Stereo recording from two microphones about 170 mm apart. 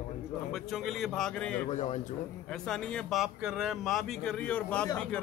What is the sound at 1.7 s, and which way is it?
Speech, 45° left (ahead or behind).